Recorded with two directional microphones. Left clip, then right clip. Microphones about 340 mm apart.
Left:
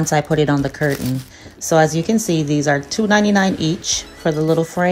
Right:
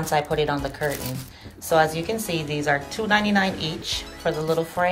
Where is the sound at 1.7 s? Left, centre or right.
Left.